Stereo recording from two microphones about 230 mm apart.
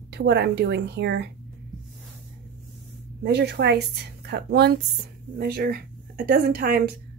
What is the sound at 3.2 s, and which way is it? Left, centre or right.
A woman's voice, right.